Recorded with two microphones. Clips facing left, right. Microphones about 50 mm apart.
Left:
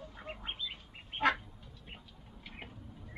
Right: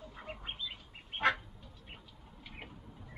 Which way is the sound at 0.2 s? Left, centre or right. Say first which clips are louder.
Left 1 dB; centre.